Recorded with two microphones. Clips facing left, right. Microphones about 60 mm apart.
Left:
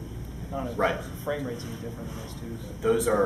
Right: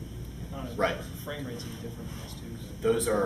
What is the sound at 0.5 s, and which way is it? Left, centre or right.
Speech, centre.